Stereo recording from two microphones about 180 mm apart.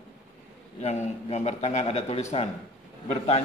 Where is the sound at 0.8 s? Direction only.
35° left (ahead or behind).